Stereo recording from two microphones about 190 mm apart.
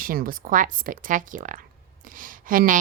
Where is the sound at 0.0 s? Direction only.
50° right (ahead or behind).